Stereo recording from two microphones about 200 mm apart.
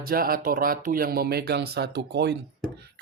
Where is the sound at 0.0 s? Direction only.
45° right (ahead or behind).